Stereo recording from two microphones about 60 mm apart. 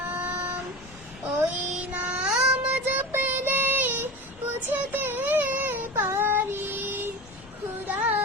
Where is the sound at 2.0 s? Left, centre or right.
Centre.